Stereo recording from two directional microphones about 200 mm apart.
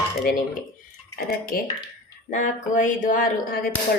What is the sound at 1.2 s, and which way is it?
Speech, 50° left (ahead or behind).